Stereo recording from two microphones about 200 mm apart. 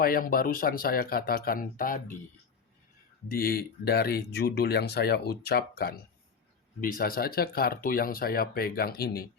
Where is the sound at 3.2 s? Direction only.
50° left (ahead or behind).